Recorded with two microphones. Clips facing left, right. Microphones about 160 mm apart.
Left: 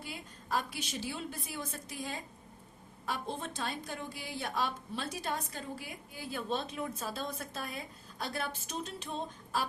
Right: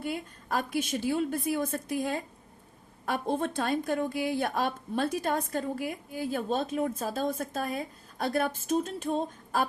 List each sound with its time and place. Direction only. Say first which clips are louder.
0.0 s a woman's voice: right 11 dB; 55° right (ahead or behind)